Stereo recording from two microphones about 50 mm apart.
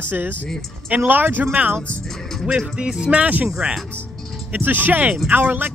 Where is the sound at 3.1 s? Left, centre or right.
Right.